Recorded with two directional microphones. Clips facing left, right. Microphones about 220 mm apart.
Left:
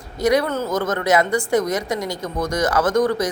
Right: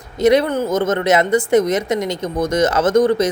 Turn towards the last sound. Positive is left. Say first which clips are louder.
# right 4 dB
turn(degrees=-25)  # may be behind; listen again after turning